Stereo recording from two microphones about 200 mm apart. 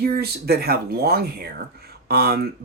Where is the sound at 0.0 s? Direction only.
50° right (ahead or behind).